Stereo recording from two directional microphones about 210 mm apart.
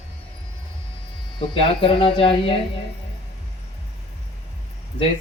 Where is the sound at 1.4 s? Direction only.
20° left (ahead or behind).